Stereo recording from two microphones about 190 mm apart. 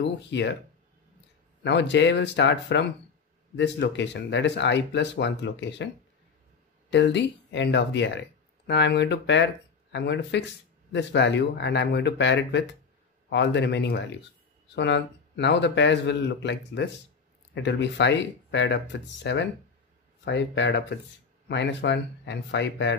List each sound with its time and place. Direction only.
0.0 s speech: 70° left (ahead or behind)
1.6 s speech: 70° left (ahead or behind)
6.9 s speech: 65° left (ahead or behind)